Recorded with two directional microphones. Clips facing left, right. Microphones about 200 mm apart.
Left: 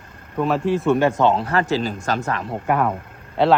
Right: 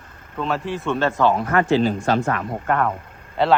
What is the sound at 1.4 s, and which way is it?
Speech, 35° left (ahead or behind).